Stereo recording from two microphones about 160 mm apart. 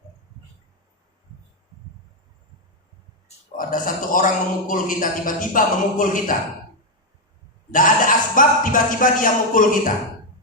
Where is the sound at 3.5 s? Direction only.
60° left (ahead or behind).